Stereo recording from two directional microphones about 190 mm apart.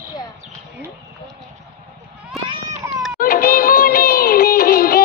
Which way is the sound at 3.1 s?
50° left (ahead or behind).